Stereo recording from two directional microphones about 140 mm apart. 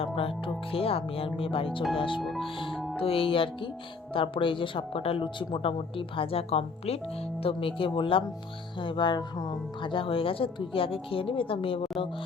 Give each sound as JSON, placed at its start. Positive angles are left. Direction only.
{"t": 0.0, "sound": "speech", "side_deg": 40}
{"t": 2.7, "sound": "music", "side_deg": 0}
{"t": 3.0, "sound": "speech", "side_deg": 40}